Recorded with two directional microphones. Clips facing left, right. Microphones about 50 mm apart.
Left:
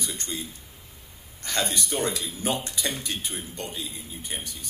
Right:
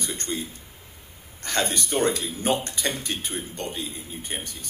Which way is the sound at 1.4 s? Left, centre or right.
Right.